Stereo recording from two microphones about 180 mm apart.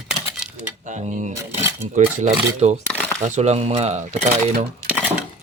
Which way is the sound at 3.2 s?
40° right (ahead or behind).